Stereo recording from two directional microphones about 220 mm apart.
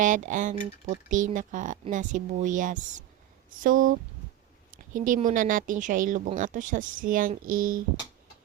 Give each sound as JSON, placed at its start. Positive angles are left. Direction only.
{"t": 0.0, "sound": "speech", "side_deg": -35}
{"t": 4.9, "sound": "speech", "side_deg": -35}